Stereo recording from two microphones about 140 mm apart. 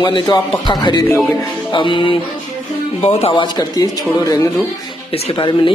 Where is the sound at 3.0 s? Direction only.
45° left (ahead or behind).